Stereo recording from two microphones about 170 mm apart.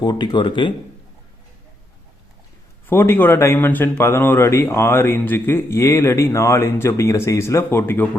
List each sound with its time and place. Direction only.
0.0 s speech: 25° left (ahead or behind)
2.8 s speech: 15° left (ahead or behind)